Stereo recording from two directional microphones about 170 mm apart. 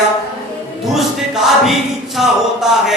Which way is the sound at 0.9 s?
Centre (ahead or behind).